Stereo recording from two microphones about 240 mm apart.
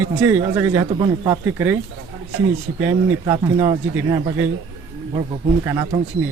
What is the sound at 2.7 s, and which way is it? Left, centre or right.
Speech, right.